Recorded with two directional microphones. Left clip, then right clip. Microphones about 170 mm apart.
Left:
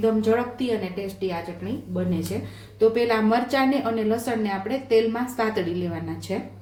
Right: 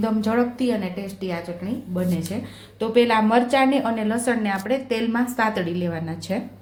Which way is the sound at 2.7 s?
30° right (ahead or behind).